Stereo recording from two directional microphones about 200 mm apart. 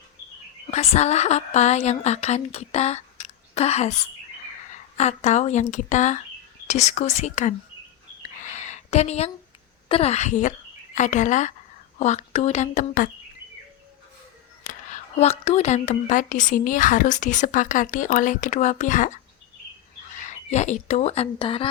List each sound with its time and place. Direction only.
0.7 s speech: 35° left (ahead or behind)
8.2 s a sound: 40° left (ahead or behind)
9.9 s speech: 30° left (ahead or behind)
14.6 s speech: 40° left (ahead or behind)
20.1 s speech: 35° left (ahead or behind)